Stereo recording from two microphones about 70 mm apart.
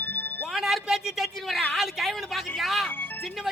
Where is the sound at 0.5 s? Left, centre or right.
Centre.